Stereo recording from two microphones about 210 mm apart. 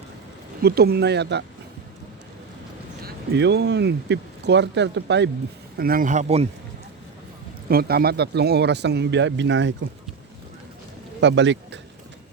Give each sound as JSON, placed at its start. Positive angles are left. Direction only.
{"t": 0.6, "sound": "a man's voice", "side_deg": -50}
{"t": 3.0, "sound": "speech", "side_deg": -55}
{"t": 5.7, "sound": "speech", "side_deg": -45}
{"t": 7.7, "sound": "a man's voice", "side_deg": -45}
{"t": 11.2, "sound": "speech", "side_deg": -55}